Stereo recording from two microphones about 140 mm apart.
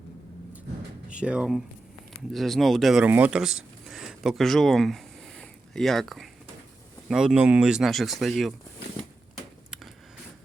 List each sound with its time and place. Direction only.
1.1 s speech: 10° right (ahead or behind)
3.1 s speech: 10° right (ahead or behind)